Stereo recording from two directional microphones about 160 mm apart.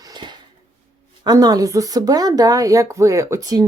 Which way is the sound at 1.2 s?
25° right (ahead or behind).